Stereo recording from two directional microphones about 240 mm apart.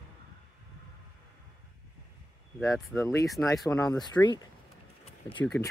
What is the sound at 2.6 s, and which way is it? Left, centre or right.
Speech, centre.